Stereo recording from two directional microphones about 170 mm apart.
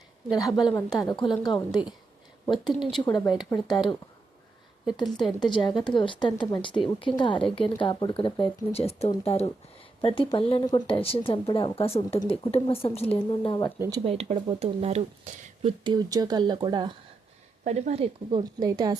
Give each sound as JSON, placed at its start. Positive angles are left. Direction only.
{"t": 0.3, "sound": "a woman's voice", "side_deg": 20}
{"t": 3.0, "sound": "a woman's voice", "side_deg": 25}
{"t": 5.0, "sound": "a woman's voice", "side_deg": 0}
{"t": 5.4, "sound": "a woman's voice", "side_deg": 25}
{"t": 13.7, "sound": "speech", "side_deg": -15}
{"t": 14.0, "sound": "speech", "side_deg": -35}
{"t": 17.6, "sound": "a woman's voice", "side_deg": -45}